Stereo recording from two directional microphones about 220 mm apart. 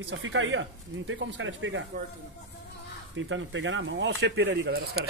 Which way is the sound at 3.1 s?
60° right (ahead or behind).